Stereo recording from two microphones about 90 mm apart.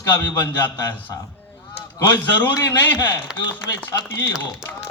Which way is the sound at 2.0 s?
20° left (ahead or behind).